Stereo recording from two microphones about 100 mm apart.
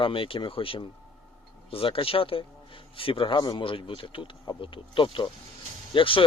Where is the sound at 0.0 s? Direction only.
60° left (ahead or behind).